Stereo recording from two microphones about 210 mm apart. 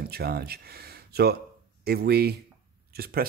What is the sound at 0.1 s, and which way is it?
Speech, 50° right (ahead or behind).